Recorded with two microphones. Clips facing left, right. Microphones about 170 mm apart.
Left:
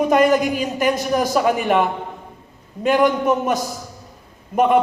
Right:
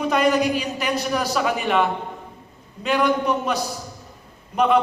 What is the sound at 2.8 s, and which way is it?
A man's voice, 50° left (ahead or behind).